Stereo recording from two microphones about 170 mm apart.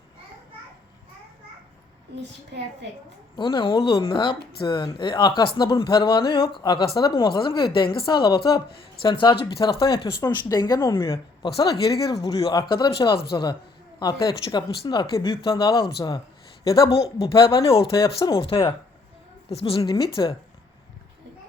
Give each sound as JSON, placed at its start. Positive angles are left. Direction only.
{"t": 2.1, "sound": "a child's voice", "side_deg": -80}
{"t": 3.3, "sound": "a woman's voice", "side_deg": 30}
{"t": 16.9, "sound": "speech", "side_deg": 35}
{"t": 20.2, "sound": "speech", "side_deg": 25}